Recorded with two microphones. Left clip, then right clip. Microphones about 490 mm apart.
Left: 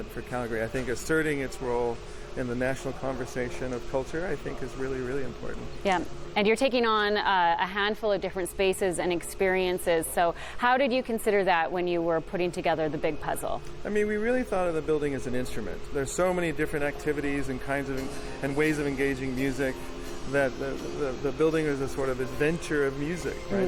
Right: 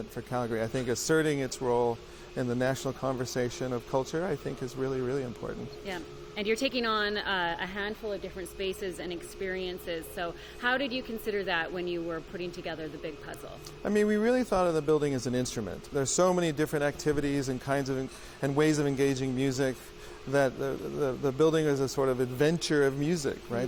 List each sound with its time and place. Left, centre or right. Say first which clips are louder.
0.3 s a man's voice: left 1 dB; right
5.8 s speech: left 16 dB; left
13.8 s a man's voice: right 1 dB; right
21.0 s a man's voice: even; right